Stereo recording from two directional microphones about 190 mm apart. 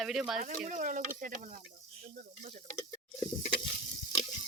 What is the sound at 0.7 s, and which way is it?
Speech, 45° right (ahead or behind).